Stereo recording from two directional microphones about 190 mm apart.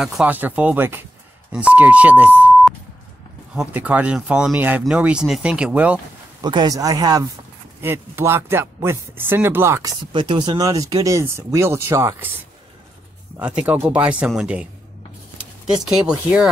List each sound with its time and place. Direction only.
0.0 s speech: 5° right (ahead or behind)
6.4 s speech: 20° right (ahead or behind)
13.4 s speech: 5° right (ahead or behind)